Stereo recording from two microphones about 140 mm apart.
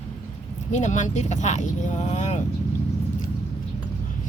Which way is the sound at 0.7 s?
60° left (ahead or behind).